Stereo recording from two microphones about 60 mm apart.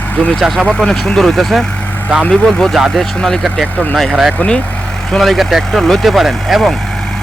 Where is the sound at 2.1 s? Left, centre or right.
Centre.